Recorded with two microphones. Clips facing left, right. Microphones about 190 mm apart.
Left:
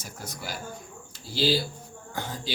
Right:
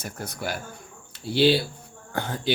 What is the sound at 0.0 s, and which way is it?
Speech, 60° right (ahead or behind).